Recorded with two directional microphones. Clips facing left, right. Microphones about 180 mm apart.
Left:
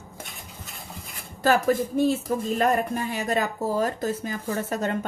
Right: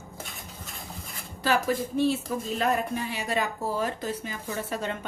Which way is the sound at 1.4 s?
45° left (ahead or behind).